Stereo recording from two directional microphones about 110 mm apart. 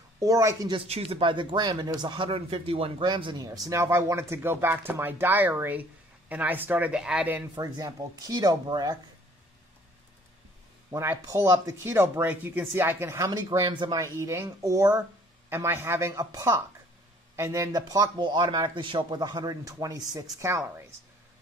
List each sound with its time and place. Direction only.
0.2 s speech: 30° right (ahead or behind)
0.8 s speech: 65° right (ahead or behind)
3.1 s speech: 45° right (ahead or behind)
3.4 s speech: 30° right (ahead or behind); by 7.4 s 10° right (ahead or behind)
7.5 s speech: 35° right (ahead or behind)
10.9 s speech: 25° right (ahead or behind)
11.8 s speech: 20° right (ahead or behind)
13.2 s speech: 35° right (ahead or behind)
13.9 s speech: 30° right (ahead or behind)
16.1 s speech: 30° right (ahead or behind)